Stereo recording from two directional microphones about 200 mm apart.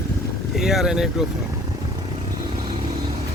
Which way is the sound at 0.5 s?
Centre (ahead or behind).